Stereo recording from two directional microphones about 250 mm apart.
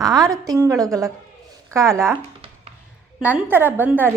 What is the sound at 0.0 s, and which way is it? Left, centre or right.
Speech, centre.